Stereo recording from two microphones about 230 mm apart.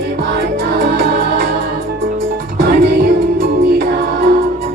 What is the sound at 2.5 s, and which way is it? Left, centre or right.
Music, right.